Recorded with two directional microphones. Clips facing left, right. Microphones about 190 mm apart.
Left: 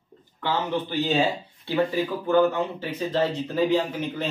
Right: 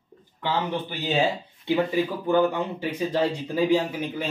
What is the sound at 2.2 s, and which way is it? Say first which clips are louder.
A man's voice: left 3 dB; 15° right (ahead or behind).